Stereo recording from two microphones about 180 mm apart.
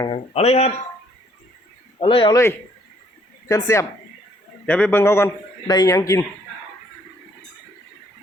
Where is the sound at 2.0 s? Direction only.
30° left (ahead or behind).